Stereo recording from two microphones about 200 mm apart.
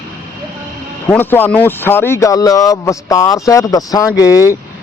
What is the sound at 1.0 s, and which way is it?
Speech, 10° left (ahead or behind).